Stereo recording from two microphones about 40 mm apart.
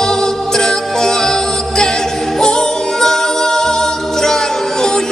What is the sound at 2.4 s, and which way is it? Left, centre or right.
Music, centre.